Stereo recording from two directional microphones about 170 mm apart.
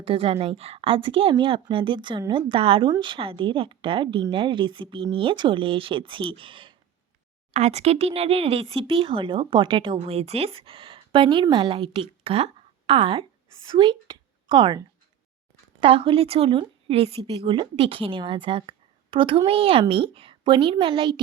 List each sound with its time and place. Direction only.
0.0 s a woman's voice: 35° right (ahead or behind)
15.8 s speech: 35° right (ahead or behind)